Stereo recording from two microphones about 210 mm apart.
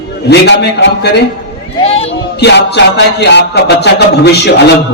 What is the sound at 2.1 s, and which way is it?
Music, 55° left (ahead or behind).